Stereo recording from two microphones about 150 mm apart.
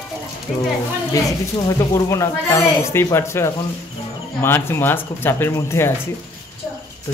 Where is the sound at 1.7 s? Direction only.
20° left (ahead or behind).